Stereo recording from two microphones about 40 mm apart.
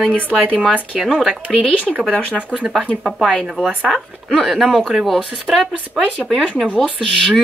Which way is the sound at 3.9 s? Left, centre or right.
Centre.